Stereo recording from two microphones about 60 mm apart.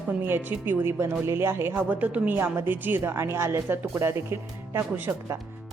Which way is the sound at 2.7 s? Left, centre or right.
Right.